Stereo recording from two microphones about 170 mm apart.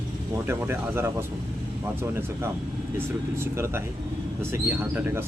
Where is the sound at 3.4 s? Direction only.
15° right (ahead or behind).